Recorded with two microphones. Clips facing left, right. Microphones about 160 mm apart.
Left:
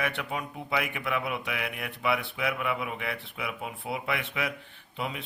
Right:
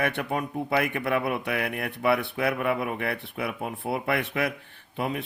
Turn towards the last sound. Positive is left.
turn(degrees=-50)  # may be behind; listen again after turning